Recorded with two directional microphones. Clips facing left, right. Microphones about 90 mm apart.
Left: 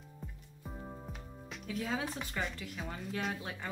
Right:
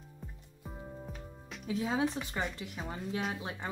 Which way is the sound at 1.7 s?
20° right (ahead or behind).